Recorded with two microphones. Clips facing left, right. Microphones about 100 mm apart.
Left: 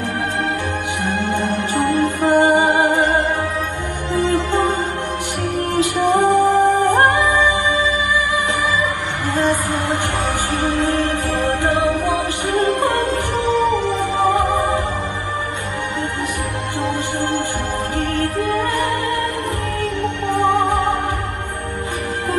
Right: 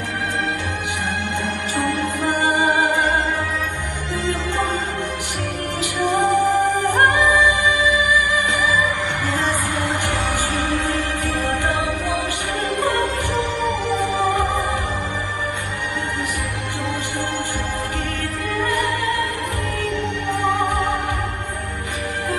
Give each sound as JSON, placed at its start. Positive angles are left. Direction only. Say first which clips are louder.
{"t": 1.2, "sound": "music", "louder": "left 5 dB", "side_deg": 20}
{"t": 5.8, "sound": "music", "louder": "left 4 dB", "side_deg": 15}
{"t": 9.5, "sound": "music", "louder": "left 3 dB", "side_deg": 15}
{"t": 17.9, "sound": "music", "louder": "left 6 dB", "side_deg": 20}